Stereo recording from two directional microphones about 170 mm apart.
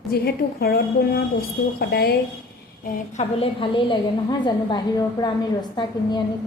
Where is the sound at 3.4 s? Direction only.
30° left (ahead or behind).